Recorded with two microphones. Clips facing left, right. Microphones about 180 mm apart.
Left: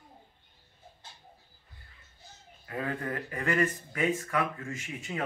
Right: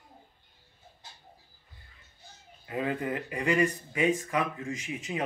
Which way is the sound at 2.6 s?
20° right (ahead or behind).